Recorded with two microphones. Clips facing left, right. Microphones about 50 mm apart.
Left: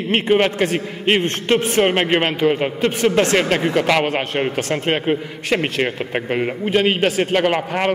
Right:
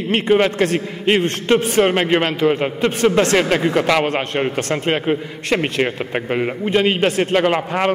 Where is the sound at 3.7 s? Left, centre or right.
Centre.